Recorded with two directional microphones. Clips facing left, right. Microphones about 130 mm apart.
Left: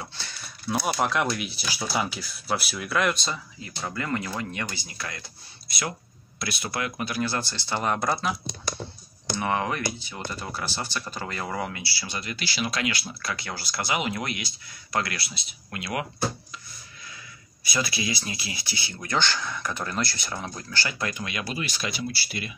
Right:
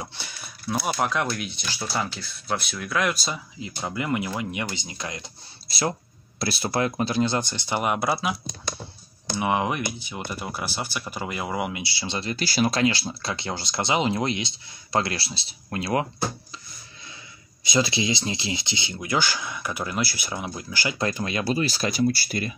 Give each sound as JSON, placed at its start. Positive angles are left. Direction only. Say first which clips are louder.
{"t": 0.0, "sound": "a sound", "louder": "right 2 dB", "side_deg": -15}
{"t": 0.7, "sound": "speech", "louder": "even", "side_deg": 0}
{"t": 3.6, "sound": "speech", "louder": "right 3 dB", "side_deg": -15}
{"t": 5.7, "sound": "speech", "louder": "right 6 dB", "side_deg": -30}
{"t": 9.4, "sound": "speech", "louder": "right 3 dB", "side_deg": -15}
{"t": 17.6, "sound": "speech", "louder": "right 5 dB", "side_deg": -25}
{"t": 18.9, "sound": "speech", "louder": "right 1 dB", "side_deg": -10}
{"t": 21.0, "sound": "speech", "louder": "right 5 dB", "side_deg": -35}